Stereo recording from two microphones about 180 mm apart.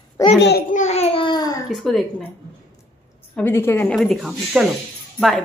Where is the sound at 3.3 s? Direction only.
10° left (ahead or behind).